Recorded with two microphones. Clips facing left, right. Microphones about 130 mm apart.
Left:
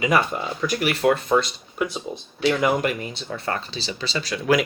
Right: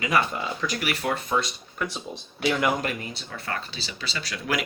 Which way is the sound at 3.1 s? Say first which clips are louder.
Left 5 dB; 30° left (ahead or behind).